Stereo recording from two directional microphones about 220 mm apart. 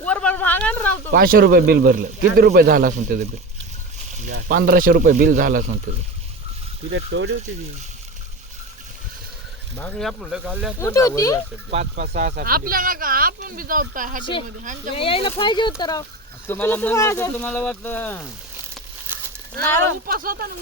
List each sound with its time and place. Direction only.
0.0 s a sound: 5° left (ahead or behind)
1.1 s speech: 40° right (ahead or behind)
4.3 s speech: 45° right (ahead or behind)
6.9 s speech: 55° right (ahead or behind)
9.7 s speech: 5° left (ahead or behind)
10.8 s speech: 15° left (ahead or behind)
11.7 s speech: 30° right (ahead or behind)
14.9 s speech: 25° left (ahead or behind); by 18.2 s 10° left (ahead or behind)
19.1 s a sound: 10° right (ahead or behind)
20.1 s speech: 40° right (ahead or behind)